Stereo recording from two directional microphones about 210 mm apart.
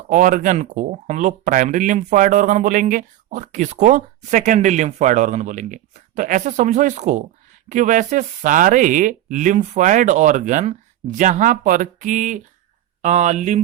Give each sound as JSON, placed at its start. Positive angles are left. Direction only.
{"t": 0.1, "sound": "speech", "side_deg": -40}